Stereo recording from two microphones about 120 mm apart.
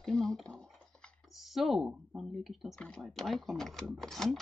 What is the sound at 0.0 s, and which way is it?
Speech, 5° left (ahead or behind).